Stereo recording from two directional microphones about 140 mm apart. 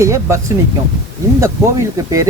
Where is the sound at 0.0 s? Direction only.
20° right (ahead or behind).